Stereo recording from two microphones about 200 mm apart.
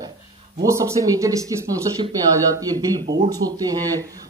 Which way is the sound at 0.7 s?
15° right (ahead or behind).